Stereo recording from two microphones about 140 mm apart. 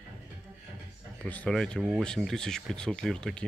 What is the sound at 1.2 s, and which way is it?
Speech, 5° left (ahead or behind).